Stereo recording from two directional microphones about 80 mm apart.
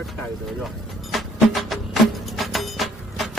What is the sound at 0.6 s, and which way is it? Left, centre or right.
Music, centre.